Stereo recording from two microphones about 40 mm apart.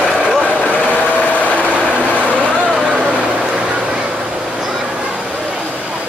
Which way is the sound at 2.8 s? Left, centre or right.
Right.